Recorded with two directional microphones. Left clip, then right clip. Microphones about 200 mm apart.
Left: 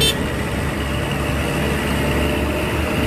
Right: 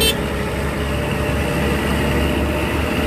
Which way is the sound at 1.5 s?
30° right (ahead or behind).